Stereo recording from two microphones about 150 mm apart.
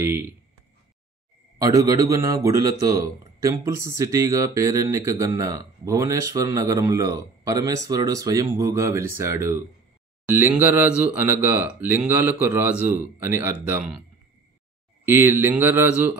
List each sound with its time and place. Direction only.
0.0 s speech: 15° right (ahead or behind)
1.6 s a man's voice: 25° right (ahead or behind)
12.9 s speech: 65° left (ahead or behind)
13.4 s speech: 15° right (ahead or behind)
15.0 s speech: 15° right (ahead or behind)